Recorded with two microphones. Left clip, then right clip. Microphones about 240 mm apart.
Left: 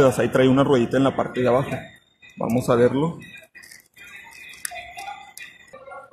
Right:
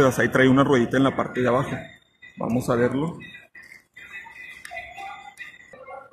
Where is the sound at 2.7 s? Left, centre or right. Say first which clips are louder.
Left 5 dB; centre.